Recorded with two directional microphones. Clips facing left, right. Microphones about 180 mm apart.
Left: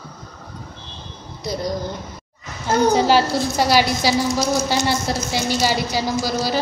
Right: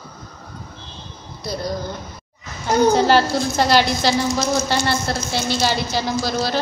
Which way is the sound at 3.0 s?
10° left (ahead or behind).